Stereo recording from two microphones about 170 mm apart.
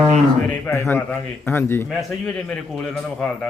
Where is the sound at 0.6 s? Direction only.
15° left (ahead or behind).